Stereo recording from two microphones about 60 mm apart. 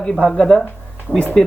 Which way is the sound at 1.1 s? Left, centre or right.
Right.